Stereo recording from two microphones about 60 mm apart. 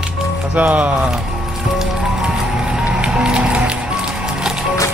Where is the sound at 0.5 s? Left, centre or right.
Centre.